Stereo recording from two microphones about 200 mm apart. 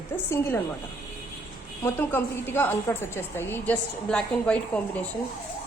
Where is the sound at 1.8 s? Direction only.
10° left (ahead or behind).